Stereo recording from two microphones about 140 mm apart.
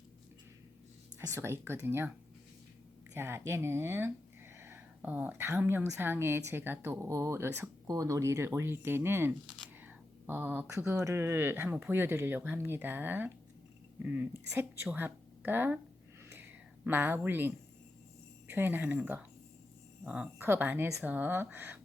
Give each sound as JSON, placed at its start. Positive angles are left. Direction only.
{"t": 1.3, "sound": "speech", "side_deg": -15}
{"t": 3.2, "sound": "speech", "side_deg": -15}
{"t": 16.3, "sound": "a sound", "side_deg": -15}
{"t": 18.5, "sound": "speech", "side_deg": -15}